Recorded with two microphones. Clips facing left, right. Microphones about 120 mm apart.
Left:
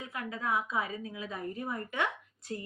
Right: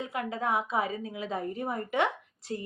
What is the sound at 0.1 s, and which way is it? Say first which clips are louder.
A woman's voice: right 2 dB; 30° right (ahead or behind).